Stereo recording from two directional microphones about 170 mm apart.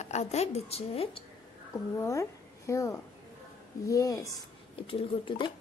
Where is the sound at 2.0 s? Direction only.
15° left (ahead or behind).